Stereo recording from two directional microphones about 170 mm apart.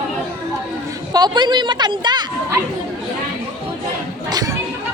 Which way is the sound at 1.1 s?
25° right (ahead or behind).